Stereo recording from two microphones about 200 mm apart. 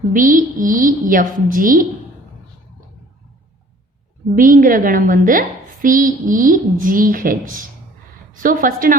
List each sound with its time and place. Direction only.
0.1 s a woman's voice: 40° right (ahead or behind)
4.4 s a woman's voice: 40° right (ahead or behind)